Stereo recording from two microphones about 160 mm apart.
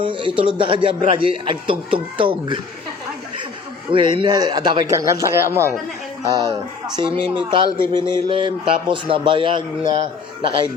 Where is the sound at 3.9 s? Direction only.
30° right (ahead or behind); by 5.7 s 15° right (ahead or behind).